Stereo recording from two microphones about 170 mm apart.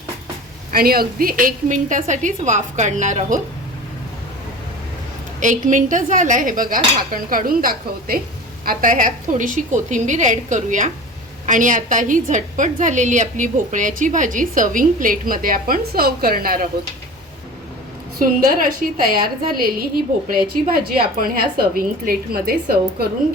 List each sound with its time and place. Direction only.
0.7 s a woman's voice: 60° right (ahead or behind)
5.4 s a woman's voice: 50° right (ahead or behind)
18.2 s a woman's voice: 55° right (ahead or behind)